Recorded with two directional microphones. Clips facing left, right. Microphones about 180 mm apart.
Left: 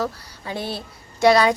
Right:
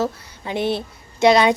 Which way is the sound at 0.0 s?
20° right (ahead or behind).